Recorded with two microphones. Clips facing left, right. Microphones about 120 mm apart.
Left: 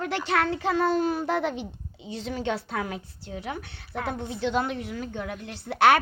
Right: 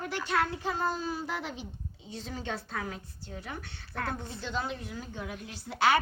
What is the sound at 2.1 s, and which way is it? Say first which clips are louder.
A woman's voice: left 8 dB; 75° left (ahead or behind).